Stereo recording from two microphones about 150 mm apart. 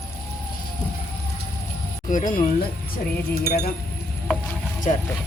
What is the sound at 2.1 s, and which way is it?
Speech, 60° left (ahead or behind).